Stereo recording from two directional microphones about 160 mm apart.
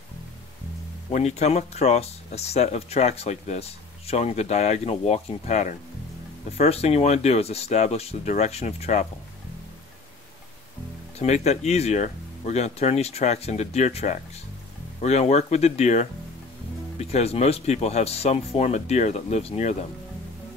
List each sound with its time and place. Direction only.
1.1 s speech: 45° left (ahead or behind)
11.1 s speech: 45° left (ahead or behind)